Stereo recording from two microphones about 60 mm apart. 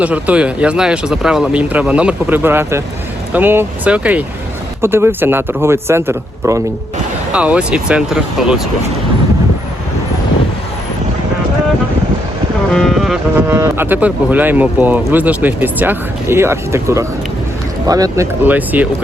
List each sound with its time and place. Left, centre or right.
0.0 s speech: right
1.5 s a man's voice: right
2.3 s speech: right
3.8 s a man's voice: right
4.8 s a man's voice: right
7.3 s speech: centre
13.5 s speech: right
14.0 s speech: right
16.3 s a man's voice: right
17.8 s speech: right
18.4 s a man's voice: right